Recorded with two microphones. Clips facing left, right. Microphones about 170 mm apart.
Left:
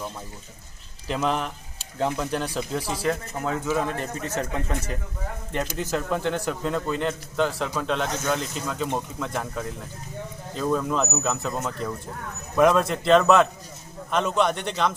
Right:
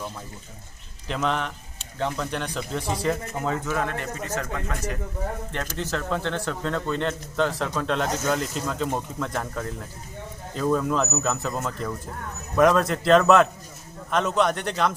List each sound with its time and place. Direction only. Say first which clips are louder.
1.0 s speech: left 1 dB; 5° left (ahead or behind)
4.4 s speech: left 4 dB; 25° left (ahead or behind)
5.5 s speech: left 2 dB; 15° left (ahead or behind); by 14.9 s centre (ahead or behind)